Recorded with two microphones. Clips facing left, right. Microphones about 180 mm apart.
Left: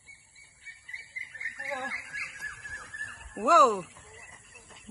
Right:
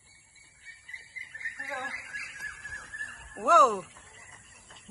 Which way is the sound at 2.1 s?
40° right (ahead or behind).